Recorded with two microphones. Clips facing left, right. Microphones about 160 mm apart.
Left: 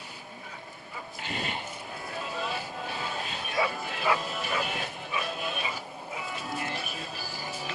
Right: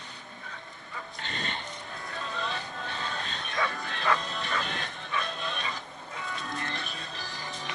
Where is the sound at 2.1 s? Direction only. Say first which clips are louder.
Left 1 dB; 10° left (ahead or behind).